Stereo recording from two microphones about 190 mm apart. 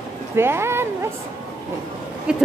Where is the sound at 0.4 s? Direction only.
15° right (ahead or behind).